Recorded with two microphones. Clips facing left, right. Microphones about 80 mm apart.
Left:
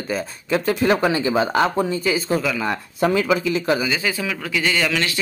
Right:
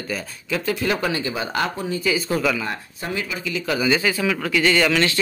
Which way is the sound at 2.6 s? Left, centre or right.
Left.